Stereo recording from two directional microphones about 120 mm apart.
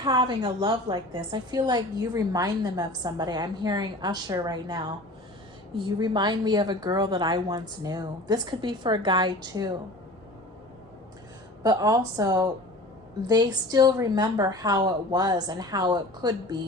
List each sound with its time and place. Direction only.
0.0 s a woman's voice: 40° right (ahead or behind)
5.7 s a woman's voice: 40° right (ahead or behind)
11.6 s a woman's voice: 30° right (ahead or behind)